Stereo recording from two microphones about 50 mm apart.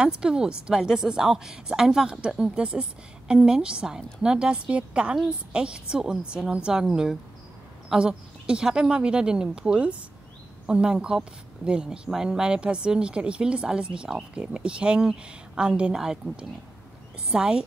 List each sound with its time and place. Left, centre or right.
0.0 s a woman's voice: centre